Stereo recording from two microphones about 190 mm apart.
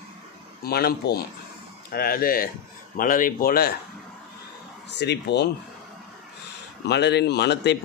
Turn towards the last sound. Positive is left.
turn(degrees=60)  # may be behind; listen again after turning